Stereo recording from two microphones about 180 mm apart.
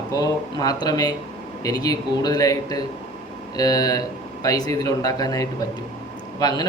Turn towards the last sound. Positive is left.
turn(degrees=20)  # may be behind; listen again after turning